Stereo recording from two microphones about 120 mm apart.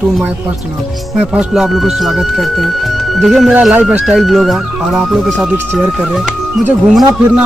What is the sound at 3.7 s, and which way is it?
Speech, 10° right (ahead or behind).